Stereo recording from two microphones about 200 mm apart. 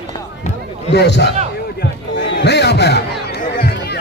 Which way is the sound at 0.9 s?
60° left (ahead or behind).